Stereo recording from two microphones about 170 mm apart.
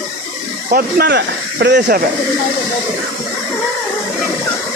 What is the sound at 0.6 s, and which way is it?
A man's voice, 60° right (ahead or behind).